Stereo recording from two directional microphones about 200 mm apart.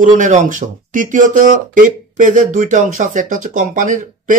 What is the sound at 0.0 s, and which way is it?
Speech, 40° right (ahead or behind).